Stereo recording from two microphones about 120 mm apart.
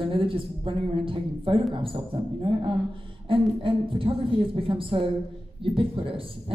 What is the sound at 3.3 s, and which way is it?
A woman's voice, 50° right (ahead or behind).